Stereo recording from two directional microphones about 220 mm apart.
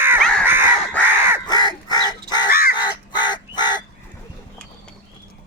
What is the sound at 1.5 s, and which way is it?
Crow, 20° left (ahead or behind).